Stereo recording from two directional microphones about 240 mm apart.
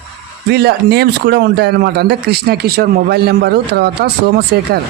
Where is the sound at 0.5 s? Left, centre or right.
Right.